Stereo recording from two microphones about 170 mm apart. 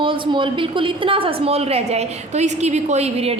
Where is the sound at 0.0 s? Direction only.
30° right (ahead or behind).